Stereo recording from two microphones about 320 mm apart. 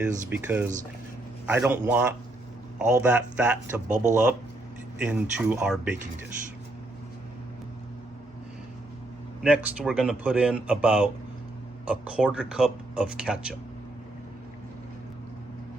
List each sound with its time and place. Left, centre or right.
0.0 s speech: centre
3.8 s speech: right
4.9 s speech: centre
9.4 s speech: centre